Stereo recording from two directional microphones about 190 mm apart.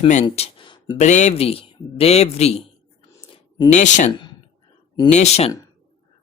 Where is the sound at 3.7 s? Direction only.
40° left (ahead or behind).